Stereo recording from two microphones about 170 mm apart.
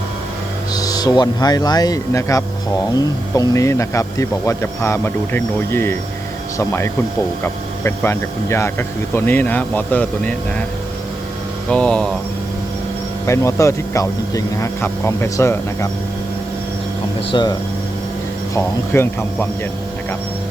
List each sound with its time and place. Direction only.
0.7 s speech: 20° left (ahead or behind)
11.7 s speech: 5° left (ahead or behind)
13.2 s speech: 15° left (ahead or behind)
17.3 s speech: 25° left (ahead or behind)
18.5 s speech: 15° left (ahead or behind)